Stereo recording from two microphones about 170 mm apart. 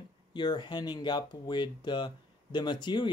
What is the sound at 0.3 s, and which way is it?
Speech, 25° left (ahead or behind).